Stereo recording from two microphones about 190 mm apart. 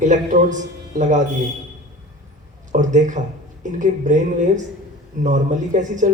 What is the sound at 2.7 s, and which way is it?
Speech, 40° right (ahead or behind).